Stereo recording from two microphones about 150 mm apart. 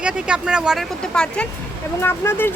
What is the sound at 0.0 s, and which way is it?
Speech, 5° right (ahead or behind).